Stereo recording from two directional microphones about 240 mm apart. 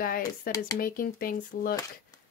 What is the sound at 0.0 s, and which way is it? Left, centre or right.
Speech, left.